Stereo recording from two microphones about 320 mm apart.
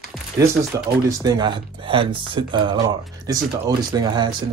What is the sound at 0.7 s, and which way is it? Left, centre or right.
Speech, centre.